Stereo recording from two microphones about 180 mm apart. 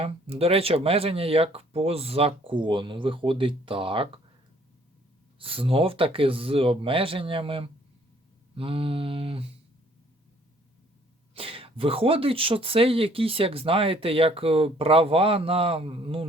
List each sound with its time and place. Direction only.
0.0 s speech: 35° right (ahead or behind)
5.4 s speech: 30° right (ahead or behind)
11.3 s speech: 30° right (ahead or behind)